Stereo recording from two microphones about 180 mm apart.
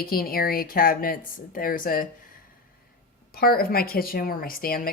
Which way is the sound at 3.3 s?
55° left (ahead or behind).